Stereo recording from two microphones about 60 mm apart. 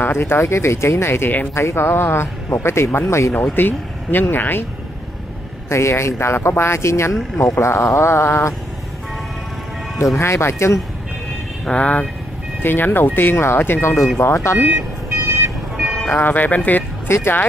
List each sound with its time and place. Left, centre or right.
0.0 s speech: left
3.5 s speech: left
5.7 s speech: left
7.3 s speech: left
7.6 s speech: left
9.9 s speech: left
11.6 s speech: left
12.6 s speech: left
14.6 s speech: right
15.8 s music: centre
16.1 s speech: left
17.1 s speech: left